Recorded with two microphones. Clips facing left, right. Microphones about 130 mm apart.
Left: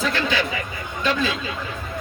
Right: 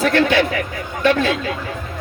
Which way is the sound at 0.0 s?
65° right (ahead or behind).